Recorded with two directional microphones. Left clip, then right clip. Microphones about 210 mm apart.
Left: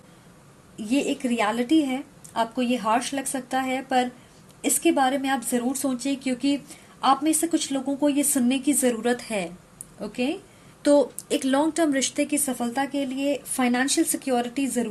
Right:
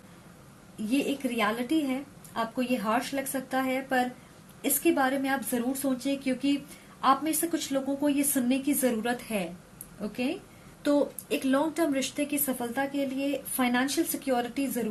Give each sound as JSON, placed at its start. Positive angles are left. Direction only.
{"t": 0.9, "sound": "a woman's voice", "side_deg": 45}
{"t": 10.8, "sound": "a woman's voice", "side_deg": 50}